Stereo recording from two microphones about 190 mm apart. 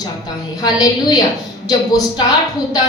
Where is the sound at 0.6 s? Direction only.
20° left (ahead or behind).